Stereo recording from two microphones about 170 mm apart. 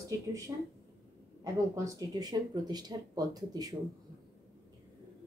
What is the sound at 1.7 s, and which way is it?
A woman's voice, 20° right (ahead or behind).